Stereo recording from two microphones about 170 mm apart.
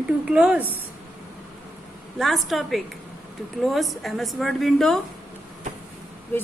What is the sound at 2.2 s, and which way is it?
A woman's voice, centre (ahead or behind).